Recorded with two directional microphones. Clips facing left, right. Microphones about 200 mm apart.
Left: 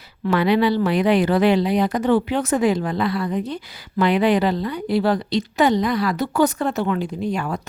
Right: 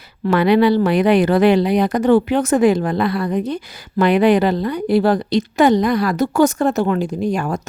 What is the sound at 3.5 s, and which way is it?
A woman's voice, 50° right (ahead or behind).